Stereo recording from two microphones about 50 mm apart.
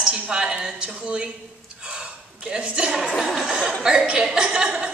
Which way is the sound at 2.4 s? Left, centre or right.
Right.